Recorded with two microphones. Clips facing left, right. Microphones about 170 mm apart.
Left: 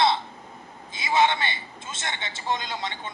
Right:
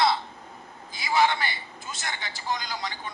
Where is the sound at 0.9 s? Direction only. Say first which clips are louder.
Left 1 dB; 25° left (ahead or behind).